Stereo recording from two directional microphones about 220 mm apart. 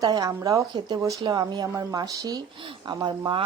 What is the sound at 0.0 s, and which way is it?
A woman's voice, 15° right (ahead or behind).